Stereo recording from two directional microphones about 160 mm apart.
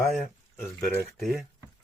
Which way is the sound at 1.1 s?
Centre (ahead or behind).